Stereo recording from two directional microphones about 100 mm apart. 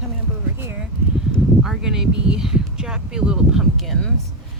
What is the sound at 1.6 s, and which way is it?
Speech, 5° right (ahead or behind).